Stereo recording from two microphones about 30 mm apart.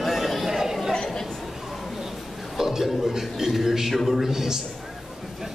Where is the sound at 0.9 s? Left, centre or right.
Left.